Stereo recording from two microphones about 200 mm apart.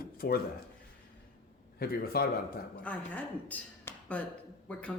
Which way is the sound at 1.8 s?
50° left (ahead or behind).